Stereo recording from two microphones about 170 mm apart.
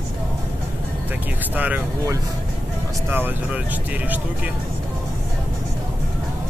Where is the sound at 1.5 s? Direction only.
10° right (ahead or behind).